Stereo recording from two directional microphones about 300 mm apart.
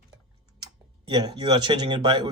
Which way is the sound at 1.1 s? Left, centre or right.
Centre.